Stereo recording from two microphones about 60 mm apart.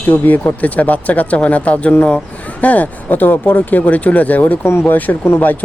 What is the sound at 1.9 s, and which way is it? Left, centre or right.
Speech, left.